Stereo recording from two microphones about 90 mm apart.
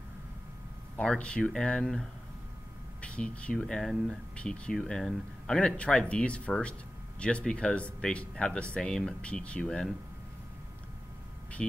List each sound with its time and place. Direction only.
0.9 s speech: 10° left (ahead or behind)